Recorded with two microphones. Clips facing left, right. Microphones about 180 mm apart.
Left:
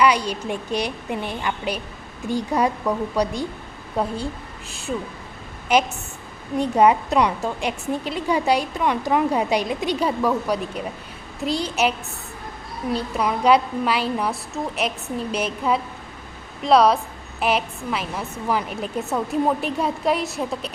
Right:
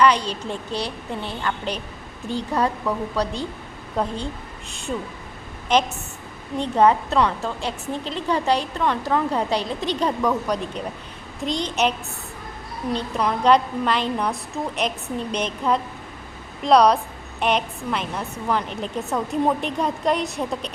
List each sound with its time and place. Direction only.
0.0 s a woman's voice: 10° left (ahead or behind)